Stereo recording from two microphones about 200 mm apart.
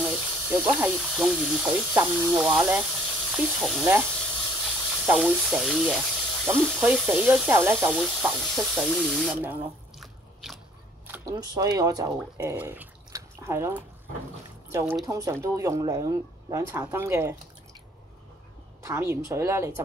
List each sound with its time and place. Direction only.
0.0 s speech: 5° right (ahead or behind)
9.9 s drip: centre (ahead or behind)
11.1 s speech: 20° right (ahead or behind)
18.8 s speech: 15° right (ahead or behind)